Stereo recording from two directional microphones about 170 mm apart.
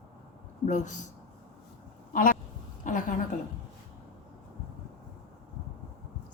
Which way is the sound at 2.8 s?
50° left (ahead or behind).